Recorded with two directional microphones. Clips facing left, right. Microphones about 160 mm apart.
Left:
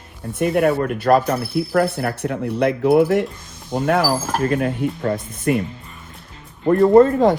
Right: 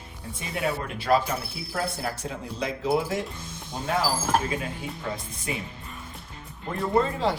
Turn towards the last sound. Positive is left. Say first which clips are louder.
# left 12 dB
turn(degrees=50)  # may be behind; listen again after turning